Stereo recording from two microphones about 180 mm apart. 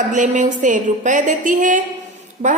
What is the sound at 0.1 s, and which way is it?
A woman's voice, 45° right (ahead or behind).